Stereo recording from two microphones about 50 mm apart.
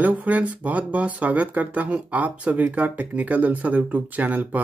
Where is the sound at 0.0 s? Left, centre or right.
Right.